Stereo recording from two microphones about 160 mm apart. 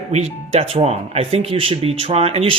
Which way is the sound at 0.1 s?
40° right (ahead or behind).